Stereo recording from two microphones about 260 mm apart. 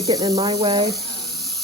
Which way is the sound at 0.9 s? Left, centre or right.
Centre.